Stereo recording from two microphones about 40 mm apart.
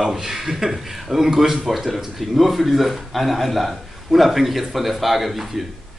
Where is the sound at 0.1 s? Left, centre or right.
Centre.